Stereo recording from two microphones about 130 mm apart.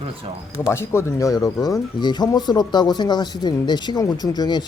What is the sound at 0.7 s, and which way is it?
Speech, 20° left (ahead or behind).